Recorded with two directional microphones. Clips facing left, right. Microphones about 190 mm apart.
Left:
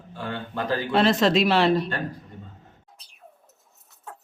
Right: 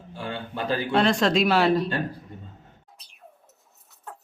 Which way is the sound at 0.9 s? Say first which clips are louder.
Left 2 dB; 5° left (ahead or behind).